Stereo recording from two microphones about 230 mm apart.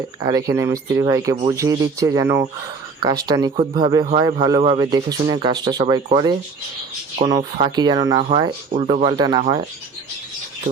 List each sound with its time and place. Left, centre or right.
0.2 s a man's voice: centre